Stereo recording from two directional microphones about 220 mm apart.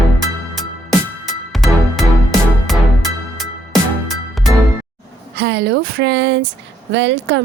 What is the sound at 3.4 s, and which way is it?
Music, centre (ahead or behind).